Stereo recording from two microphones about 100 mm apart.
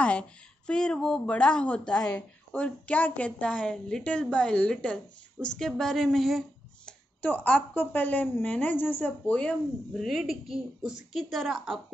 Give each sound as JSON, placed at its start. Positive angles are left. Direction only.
{"t": 0.0, "sound": "speech", "side_deg": 10}
{"t": 6.9, "sound": "speech", "side_deg": 15}
{"t": 10.0, "sound": "a woman's voice", "side_deg": -5}